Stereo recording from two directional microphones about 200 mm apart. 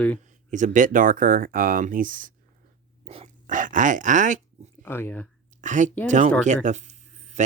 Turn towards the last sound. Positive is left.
turn(degrees=-35)  # may be behind; listen again after turning